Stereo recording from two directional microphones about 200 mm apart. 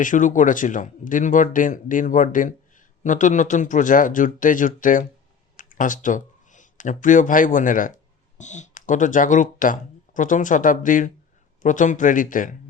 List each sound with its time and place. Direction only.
0.0 s speech: 40° left (ahead or behind)